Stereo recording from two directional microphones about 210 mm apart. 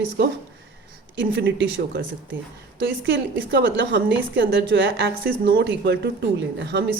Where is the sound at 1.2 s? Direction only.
55° right (ahead or behind).